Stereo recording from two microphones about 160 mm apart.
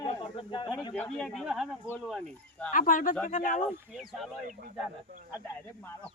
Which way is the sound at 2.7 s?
55° left (ahead or behind).